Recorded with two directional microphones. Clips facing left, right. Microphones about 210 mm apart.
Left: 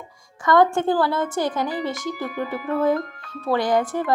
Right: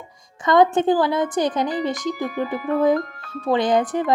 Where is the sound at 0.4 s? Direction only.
20° right (ahead or behind).